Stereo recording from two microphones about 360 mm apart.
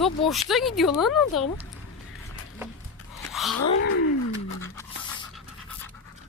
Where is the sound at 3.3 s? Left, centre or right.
Centre.